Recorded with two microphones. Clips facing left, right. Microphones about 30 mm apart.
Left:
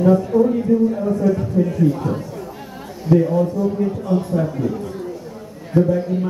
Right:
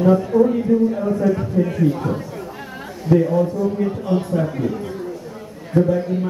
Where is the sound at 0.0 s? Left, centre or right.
Centre.